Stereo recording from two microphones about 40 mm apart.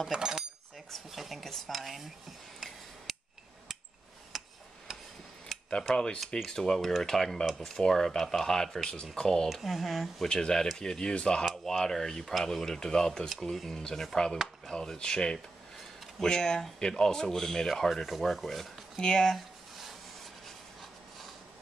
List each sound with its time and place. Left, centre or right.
0.1 s cutlery: centre
0.9 s speech: centre
3.1 s hammer: centre
4.3 s tick-tock: centre
5.5 s a sound: centre
5.9 s speech: centre
9.5 s speech: centre
10.2 s speech: centre
11.4 s speech: centre
11.8 s speech: centre
14.1 s speech: centre
19.3 s a sound: centre